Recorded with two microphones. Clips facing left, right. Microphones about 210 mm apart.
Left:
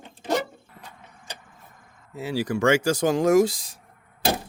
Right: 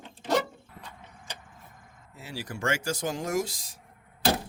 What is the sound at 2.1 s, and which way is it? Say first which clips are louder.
Speech: left 12 dB; 85° left.